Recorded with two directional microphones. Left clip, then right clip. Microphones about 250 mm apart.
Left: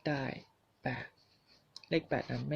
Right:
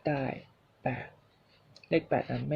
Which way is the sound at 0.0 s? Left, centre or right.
Centre.